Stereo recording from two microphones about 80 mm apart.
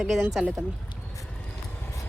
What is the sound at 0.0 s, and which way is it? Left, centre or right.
Speech, centre.